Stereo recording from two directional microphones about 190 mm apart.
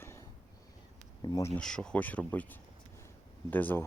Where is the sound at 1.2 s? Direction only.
20° left (ahead or behind).